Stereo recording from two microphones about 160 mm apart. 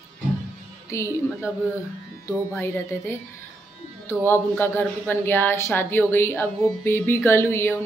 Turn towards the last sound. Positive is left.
turn(degrees=15)  # may be behind; listen again after turning